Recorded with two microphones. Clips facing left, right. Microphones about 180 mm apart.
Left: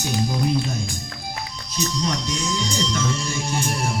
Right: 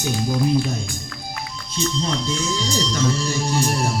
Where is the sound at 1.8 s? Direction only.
30° right (ahead or behind).